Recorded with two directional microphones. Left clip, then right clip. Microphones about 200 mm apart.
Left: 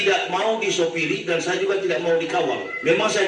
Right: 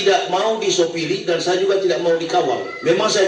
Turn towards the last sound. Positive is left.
turn(degrees=-30)  # may be behind; listen again after turning